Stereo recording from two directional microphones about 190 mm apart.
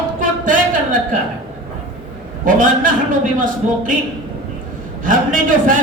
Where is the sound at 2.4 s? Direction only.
45° right (ahead or behind).